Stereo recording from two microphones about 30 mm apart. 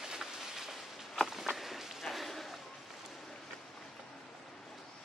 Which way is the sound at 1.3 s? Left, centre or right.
Centre.